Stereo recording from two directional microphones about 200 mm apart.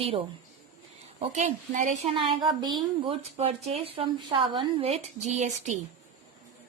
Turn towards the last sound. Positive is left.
turn(degrees=-35)  # may be behind; listen again after turning